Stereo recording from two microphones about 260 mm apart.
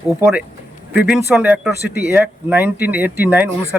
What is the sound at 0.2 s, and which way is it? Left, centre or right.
Speech, centre.